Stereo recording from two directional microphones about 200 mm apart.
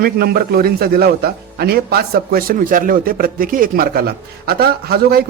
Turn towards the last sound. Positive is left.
turn(degrees=-50)  # may be behind; listen again after turning